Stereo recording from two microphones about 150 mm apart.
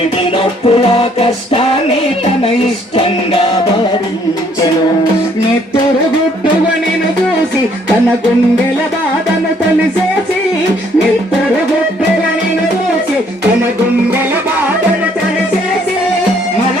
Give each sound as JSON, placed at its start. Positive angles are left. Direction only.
{"t": 0.6, "sound": "music", "side_deg": 40}